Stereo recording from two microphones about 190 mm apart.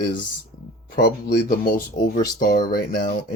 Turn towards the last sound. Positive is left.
turn(degrees=55)  # may be behind; listen again after turning